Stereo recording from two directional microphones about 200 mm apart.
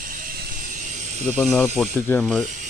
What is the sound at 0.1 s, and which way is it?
Ratchet, 45° right (ahead or behind).